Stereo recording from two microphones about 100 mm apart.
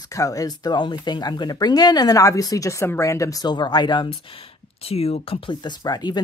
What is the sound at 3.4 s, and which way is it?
Speech, 45° left (ahead or behind).